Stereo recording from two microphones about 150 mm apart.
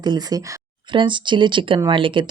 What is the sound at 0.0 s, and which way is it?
Speech, 25° right (ahead or behind).